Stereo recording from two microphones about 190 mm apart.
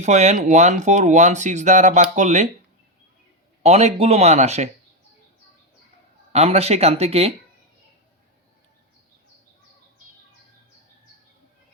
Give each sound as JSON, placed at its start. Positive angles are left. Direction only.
{"t": 0.0, "sound": "speech", "side_deg": -40}
{"t": 3.6, "sound": "speech", "side_deg": -35}
{"t": 6.3, "sound": "speech", "side_deg": -30}